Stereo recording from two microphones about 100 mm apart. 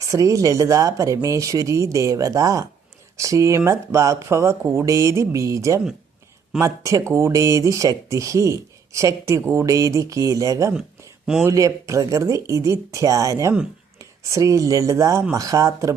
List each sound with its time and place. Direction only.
0.0 s speech: 35° right (ahead or behind)